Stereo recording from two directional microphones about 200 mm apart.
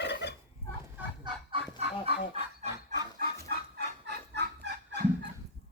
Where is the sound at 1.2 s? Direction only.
25° right (ahead or behind).